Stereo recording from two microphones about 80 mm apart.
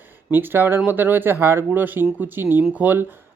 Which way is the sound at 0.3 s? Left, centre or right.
Right.